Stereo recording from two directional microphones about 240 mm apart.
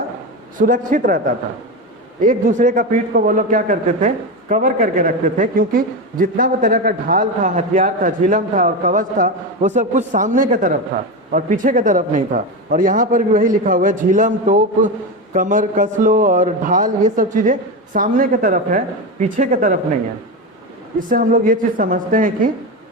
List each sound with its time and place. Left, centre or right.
0.6 s a man's voice: right
21.1 s a man's voice: right